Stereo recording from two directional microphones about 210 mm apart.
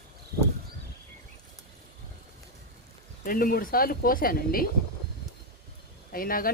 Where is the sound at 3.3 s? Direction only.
40° left (ahead or behind).